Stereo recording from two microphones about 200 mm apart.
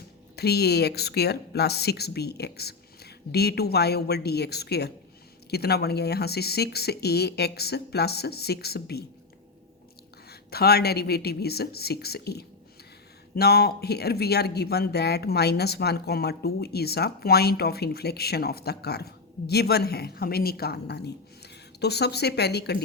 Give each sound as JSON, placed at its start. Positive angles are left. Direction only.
{"t": 0.3, "sound": "speech", "side_deg": 55}
{"t": 10.2, "sound": "speech", "side_deg": 50}